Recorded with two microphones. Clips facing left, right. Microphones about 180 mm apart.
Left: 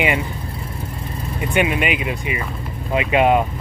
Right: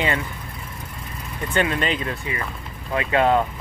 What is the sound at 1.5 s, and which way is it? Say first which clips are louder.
Speech: left 3 dB; 15° left (ahead or behind).